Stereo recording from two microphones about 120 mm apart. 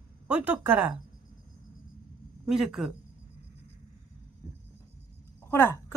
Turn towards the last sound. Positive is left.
turn(degrees=20)  # may be behind; listen again after turning